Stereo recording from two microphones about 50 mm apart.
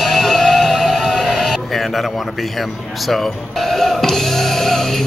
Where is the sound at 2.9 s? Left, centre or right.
Centre.